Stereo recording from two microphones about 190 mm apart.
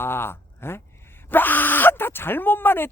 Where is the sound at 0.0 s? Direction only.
10° left (ahead or behind).